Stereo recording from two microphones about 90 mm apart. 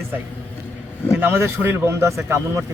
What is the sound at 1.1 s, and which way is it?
A man's voice, 20° right (ahead or behind).